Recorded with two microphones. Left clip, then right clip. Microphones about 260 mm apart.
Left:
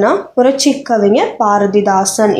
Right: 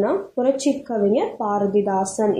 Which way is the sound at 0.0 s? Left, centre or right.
Left.